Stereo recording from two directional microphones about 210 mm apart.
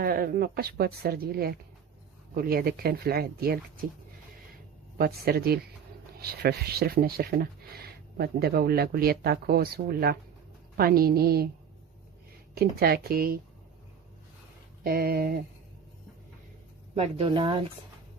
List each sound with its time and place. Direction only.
0.0 s speech: 45° right (ahead or behind)
4.9 s speech: 45° right (ahead or behind)
12.5 s speech: 45° right (ahead or behind)
14.8 s speech: 45° right (ahead or behind)
16.9 s speech: 25° right (ahead or behind)